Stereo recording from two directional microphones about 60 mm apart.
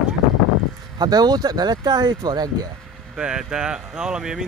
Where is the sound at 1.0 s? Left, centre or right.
Right.